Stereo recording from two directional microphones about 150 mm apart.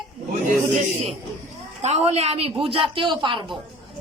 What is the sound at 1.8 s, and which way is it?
Speech, 45° right (ahead or behind).